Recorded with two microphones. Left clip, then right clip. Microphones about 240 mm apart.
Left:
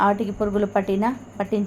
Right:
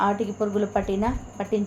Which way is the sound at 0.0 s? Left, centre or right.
Left.